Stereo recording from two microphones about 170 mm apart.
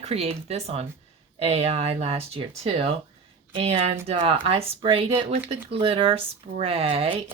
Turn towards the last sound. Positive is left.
turn(degrees=-35)  # may be behind; listen again after turning